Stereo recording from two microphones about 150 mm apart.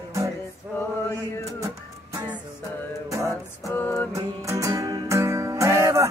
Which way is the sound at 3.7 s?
10° left (ahead or behind).